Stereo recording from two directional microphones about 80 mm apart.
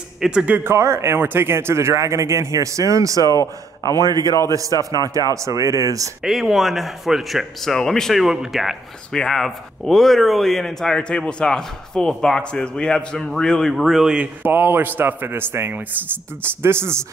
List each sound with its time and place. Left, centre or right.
0.2 s speech: centre
0.7 s speech: right
3.3 s speech: left
3.9 s a man's voice: right
6.2 s speech: centre
14.1 s a man's voice: centre